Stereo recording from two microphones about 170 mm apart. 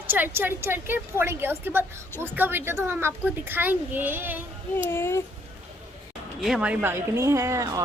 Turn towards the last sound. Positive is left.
turn(degrees=-20)  # may be behind; listen again after turning